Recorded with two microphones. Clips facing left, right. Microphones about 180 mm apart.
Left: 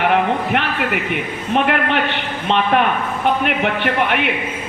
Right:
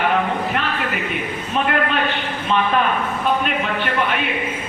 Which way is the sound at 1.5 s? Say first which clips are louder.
Left 3 dB; 70° left (ahead or behind).